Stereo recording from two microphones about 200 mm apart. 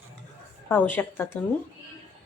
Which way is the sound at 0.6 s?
10° left (ahead or behind).